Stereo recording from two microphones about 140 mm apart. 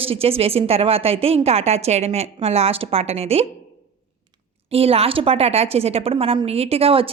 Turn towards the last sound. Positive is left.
turn(degrees=-45)  # may be behind; listen again after turning